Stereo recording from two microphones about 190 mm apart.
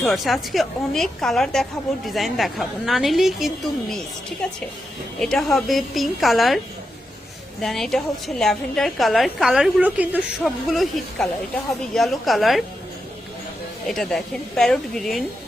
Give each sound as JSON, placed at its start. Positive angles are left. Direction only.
{"t": 0.0, "sound": "a woman's voice", "side_deg": 0}
{"t": 5.2, "sound": "a woman's voice", "side_deg": 0}
{"t": 7.6, "sound": "a woman's voice", "side_deg": 0}
{"t": 13.8, "sound": "a woman's voice", "side_deg": 0}